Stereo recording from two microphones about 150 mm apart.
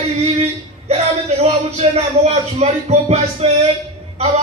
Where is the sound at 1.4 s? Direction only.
50° right (ahead or behind).